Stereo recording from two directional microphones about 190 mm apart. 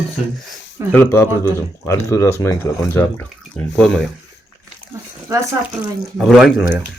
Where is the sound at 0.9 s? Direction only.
10° left (ahead or behind).